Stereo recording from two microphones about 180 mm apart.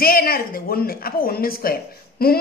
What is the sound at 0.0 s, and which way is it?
Speech, 55° left (ahead or behind).